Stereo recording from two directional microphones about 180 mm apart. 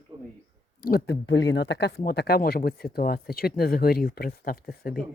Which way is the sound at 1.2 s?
80° left.